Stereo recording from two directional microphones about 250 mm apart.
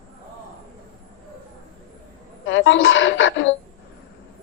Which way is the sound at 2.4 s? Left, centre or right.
Left.